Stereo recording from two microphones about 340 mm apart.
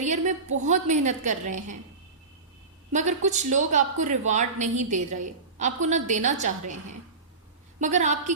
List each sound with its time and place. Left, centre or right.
0.0 s a sound: right
0.6 s a woman's voice: right
2.9 s a woman's voice: right
7.8 s a woman's voice: right